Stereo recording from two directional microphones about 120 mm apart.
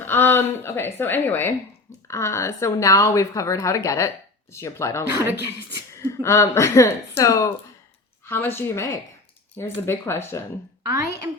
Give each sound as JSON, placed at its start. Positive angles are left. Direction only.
{"t": 0.0, "sound": "a woman's voice", "side_deg": 20}
{"t": 5.1, "sound": "speech", "side_deg": -20}
{"t": 5.9, "sound": "a woman's voice", "side_deg": 25}